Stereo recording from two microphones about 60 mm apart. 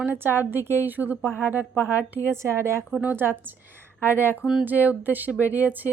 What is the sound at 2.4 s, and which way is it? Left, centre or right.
Speech, right.